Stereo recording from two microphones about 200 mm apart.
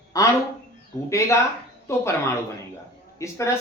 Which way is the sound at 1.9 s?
15° left (ahead or behind).